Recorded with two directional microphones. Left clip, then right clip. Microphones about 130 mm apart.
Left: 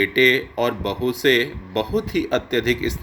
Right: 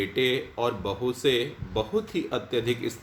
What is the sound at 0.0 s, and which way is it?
Speech, 50° left (ahead or behind).